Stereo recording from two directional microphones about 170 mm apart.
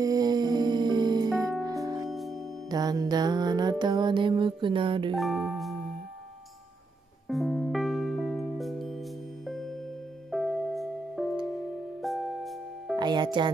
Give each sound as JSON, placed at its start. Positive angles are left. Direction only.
{"t": 0.0, "sound": "music", "side_deg": -20}
{"t": 2.0, "sound": "music", "side_deg": 0}
{"t": 2.7, "sound": "music", "side_deg": -20}
{"t": 5.1, "sound": "music", "side_deg": 0}
{"t": 7.2, "sound": "music", "side_deg": 0}
{"t": 12.9, "sound": "music", "side_deg": -25}